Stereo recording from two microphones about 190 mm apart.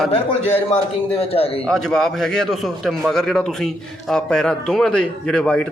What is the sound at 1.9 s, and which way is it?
Speech, centre (ahead or behind).